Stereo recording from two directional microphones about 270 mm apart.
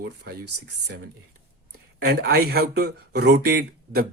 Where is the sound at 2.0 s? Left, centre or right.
Right.